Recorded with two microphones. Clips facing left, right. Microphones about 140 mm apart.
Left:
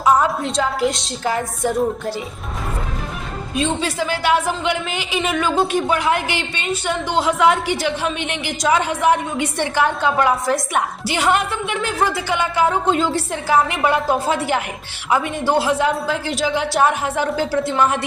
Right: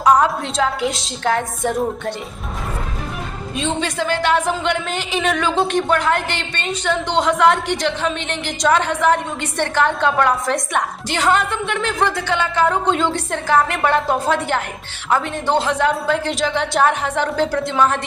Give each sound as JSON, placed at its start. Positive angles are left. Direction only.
{"t": 0.0, "sound": "a woman's voice", "side_deg": 0}
{"t": 3.5, "sound": "a woman's voice", "side_deg": 5}